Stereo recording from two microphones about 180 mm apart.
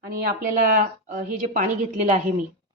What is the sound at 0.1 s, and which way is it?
Speech, 50° right (ahead or behind).